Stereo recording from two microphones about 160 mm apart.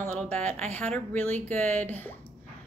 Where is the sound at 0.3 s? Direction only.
10° left (ahead or behind).